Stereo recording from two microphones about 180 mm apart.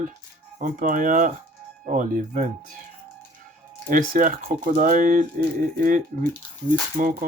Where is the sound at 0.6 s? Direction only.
50° right (ahead or behind).